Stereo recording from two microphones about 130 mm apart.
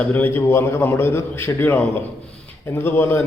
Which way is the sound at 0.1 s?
15° left (ahead or behind).